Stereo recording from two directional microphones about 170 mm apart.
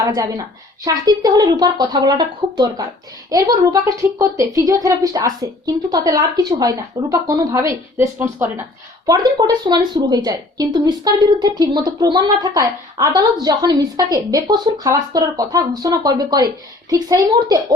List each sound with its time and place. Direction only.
0.0 s a woman's voice: 20° right (ahead or behind)
9.0 s a woman's voice: 25° right (ahead or behind)